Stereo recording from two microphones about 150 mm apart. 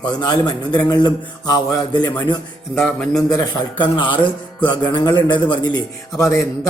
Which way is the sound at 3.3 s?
30° left (ahead or behind).